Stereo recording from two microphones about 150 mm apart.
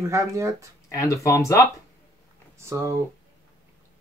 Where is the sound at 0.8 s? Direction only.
20° left (ahead or behind).